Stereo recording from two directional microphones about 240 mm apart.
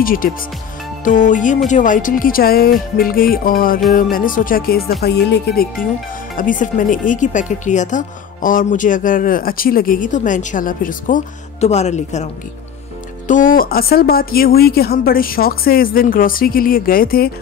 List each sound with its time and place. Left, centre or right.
0.0 s speech: left
13.3 s speech: left